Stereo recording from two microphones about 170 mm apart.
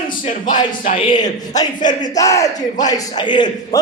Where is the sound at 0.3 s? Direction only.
50° left (ahead or behind).